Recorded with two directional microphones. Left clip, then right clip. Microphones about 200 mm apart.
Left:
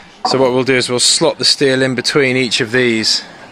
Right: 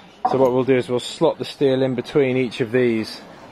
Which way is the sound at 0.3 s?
10° left (ahead or behind).